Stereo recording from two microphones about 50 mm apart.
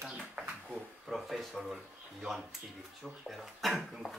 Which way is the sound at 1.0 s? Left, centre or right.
Centre.